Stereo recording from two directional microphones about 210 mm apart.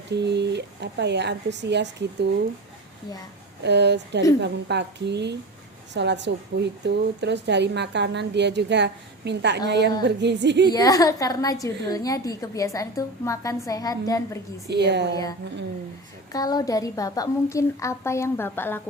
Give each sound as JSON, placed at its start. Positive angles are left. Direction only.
{"t": 0.1, "sound": "speech", "side_deg": -55}
{"t": 3.6, "sound": "a woman's voice", "side_deg": -55}
{"t": 10.7, "sound": "a woman's voice", "side_deg": 15}
{"t": 14.7, "sound": "a woman's voice", "side_deg": -55}
{"t": 16.3, "sound": "a woman's voice", "side_deg": 20}